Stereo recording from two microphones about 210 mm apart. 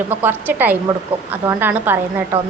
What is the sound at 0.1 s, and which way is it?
A woman's voice, 10° right (ahead or behind).